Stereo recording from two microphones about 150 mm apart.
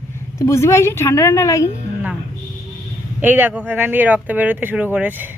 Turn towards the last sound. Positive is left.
turn(degrees=-10)  # may be behind; listen again after turning